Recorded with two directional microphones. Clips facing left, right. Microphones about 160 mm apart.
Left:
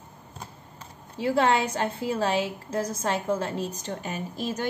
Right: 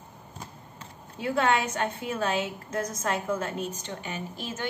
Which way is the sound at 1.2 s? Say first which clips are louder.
Left 3 dB; 30° left (ahead or behind).